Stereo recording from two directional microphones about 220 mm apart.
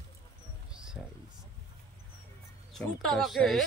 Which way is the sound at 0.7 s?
5° right (ahead or behind).